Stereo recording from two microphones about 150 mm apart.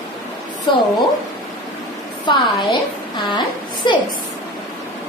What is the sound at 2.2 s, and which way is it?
A woman's voice, 30° left (ahead or behind).